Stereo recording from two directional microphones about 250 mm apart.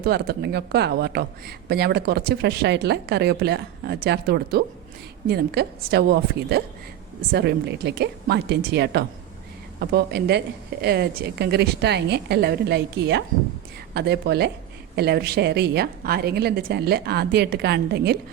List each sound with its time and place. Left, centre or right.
0.0 s speech: right